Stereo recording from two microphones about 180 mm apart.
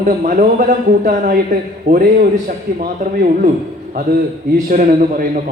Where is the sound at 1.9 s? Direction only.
40° right (ahead or behind).